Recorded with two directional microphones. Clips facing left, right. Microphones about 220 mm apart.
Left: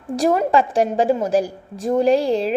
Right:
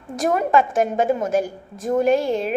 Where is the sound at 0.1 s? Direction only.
30° left (ahead or behind).